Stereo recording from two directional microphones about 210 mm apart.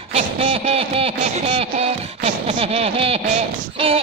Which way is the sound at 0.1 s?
30° right (ahead or behind).